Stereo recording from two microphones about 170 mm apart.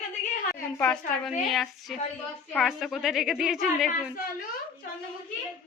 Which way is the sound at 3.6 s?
55° left (ahead or behind).